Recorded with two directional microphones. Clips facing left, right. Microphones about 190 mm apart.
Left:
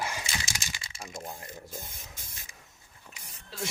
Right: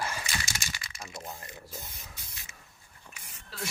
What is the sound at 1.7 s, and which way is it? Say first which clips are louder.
Spray: left 2 dB; 50° left (ahead or behind).